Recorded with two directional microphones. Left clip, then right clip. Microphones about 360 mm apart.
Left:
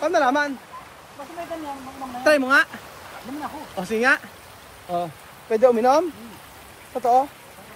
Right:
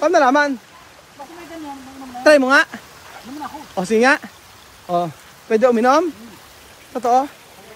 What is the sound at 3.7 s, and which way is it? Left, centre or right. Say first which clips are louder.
Speech: right 5 dB; centre.